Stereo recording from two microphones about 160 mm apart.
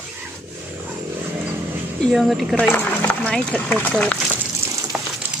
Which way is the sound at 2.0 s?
Centre (ahead or behind).